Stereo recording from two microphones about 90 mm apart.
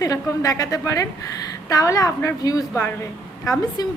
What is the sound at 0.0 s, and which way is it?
A woman's voice, 40° left (ahead or behind).